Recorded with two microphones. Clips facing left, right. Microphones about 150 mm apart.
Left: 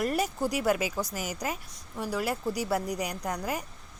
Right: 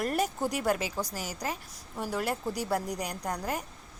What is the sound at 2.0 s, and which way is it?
A woman's voice, centre (ahead or behind).